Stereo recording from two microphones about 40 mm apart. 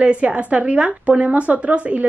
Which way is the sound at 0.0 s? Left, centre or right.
Right.